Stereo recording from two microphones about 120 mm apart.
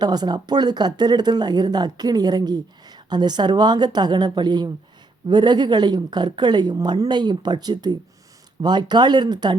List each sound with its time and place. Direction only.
0.0 s speech: 35° right (ahead or behind)